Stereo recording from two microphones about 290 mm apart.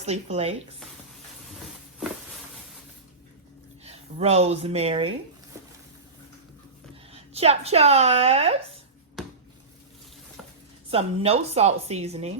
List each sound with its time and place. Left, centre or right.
0.0 s a woman's voice: right
3.8 s speech: right
5.5 s boat: centre
7.1 s speech: right
9.2 s a sound: centre
10.9 s a woman's voice: right